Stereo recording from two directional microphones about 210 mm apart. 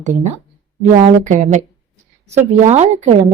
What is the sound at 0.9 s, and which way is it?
Speech, 35° right (ahead or behind).